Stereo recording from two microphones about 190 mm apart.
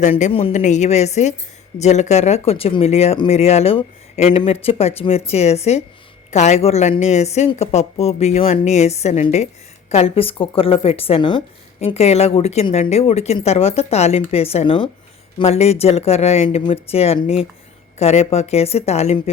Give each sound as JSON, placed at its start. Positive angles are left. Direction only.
{"t": 0.0, "sound": "speech", "side_deg": 35}